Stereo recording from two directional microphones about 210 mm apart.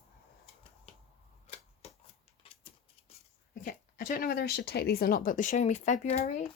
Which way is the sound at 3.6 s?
40° left (ahead or behind).